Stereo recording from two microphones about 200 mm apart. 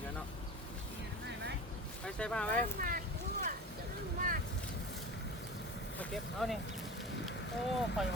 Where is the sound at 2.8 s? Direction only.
45° right (ahead or behind).